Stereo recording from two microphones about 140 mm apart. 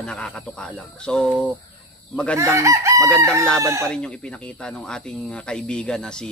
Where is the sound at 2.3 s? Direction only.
20° right (ahead or behind).